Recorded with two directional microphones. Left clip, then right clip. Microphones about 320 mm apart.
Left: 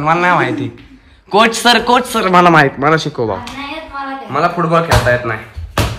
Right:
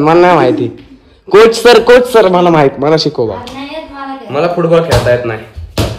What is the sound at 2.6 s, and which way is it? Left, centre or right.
Speech, centre.